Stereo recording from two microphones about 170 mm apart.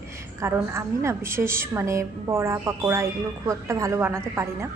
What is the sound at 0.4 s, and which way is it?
A woman's voice, 15° right (ahead or behind).